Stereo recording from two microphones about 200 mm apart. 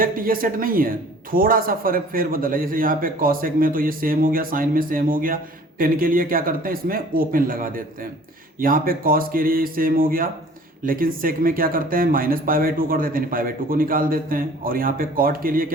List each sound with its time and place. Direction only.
0.0 s speech: 45° right (ahead or behind)